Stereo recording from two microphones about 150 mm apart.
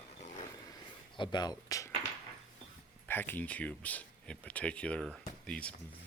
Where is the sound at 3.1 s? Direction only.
15° left (ahead or behind).